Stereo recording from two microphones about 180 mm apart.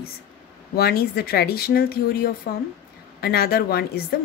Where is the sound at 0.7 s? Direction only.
60° left (ahead or behind).